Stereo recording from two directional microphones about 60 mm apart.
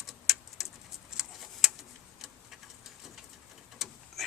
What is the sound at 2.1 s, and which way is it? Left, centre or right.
Tick-tock, centre.